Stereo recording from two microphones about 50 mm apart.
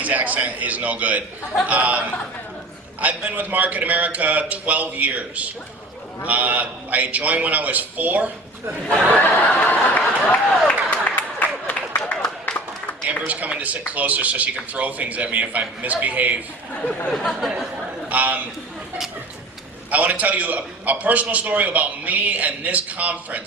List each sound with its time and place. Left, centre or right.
0.0 s a man's voice: right
9.2 s speech: left
10.7 s a sound: left
12.2 s a sound: centre
13.1 s a man's voice: right
17.1 s chatter: centre
18.1 s a man's voice: right
19.9 s a man's voice: right